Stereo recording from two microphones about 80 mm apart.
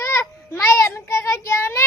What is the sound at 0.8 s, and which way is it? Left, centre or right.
Child singing, left.